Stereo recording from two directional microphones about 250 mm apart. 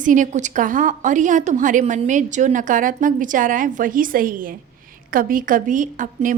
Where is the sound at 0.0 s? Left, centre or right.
Right.